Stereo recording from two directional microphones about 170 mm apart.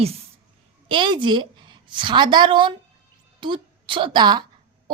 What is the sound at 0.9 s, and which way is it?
A woman's voice, 30° right (ahead or behind).